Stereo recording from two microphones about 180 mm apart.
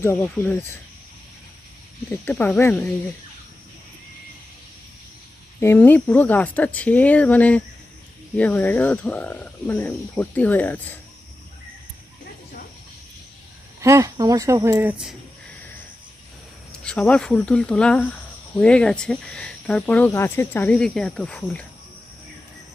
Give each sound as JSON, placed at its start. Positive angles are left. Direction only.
{"t": 0.0, "sound": "speech", "side_deg": 15}
{"t": 2.0, "sound": "speech", "side_deg": 10}
{"t": 5.5, "sound": "speech", "side_deg": 15}
{"t": 13.8, "sound": "speech", "side_deg": -20}
{"t": 16.7, "sound": "speech", "side_deg": 5}